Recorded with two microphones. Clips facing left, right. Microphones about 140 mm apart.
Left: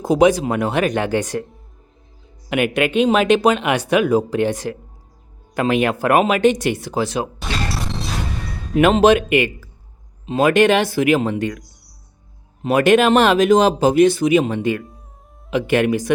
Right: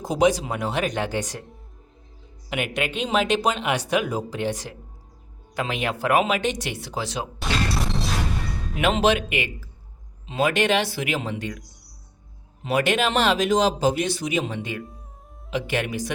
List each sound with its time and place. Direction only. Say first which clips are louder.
0.0 s speech: left 6 dB; 60° left (ahead or behind)
2.5 s speech: left 9 dB; 60° left (ahead or behind)
7.3 s smash: even; centre (ahead or behind)
8.7 s speech: left 8 dB; 45° left (ahead or behind)
12.6 s speech: left 8 dB; 50° left (ahead or behind)